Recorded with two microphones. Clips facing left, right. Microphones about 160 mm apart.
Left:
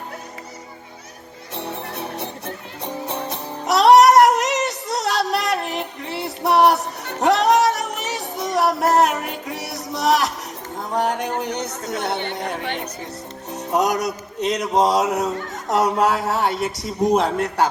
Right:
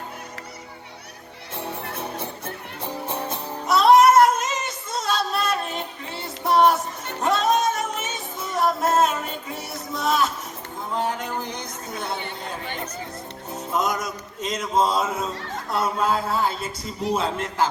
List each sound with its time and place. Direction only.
2.8 s music: 20° left (ahead or behind)
3.7 s child singing: 70° left (ahead or behind)
6.7 s music: 70° left (ahead or behind)
10.9 s a sound: 75° left (ahead or behind)
13.5 s music: 70° left (ahead or behind)
14.8 s speech: 75° left (ahead or behind)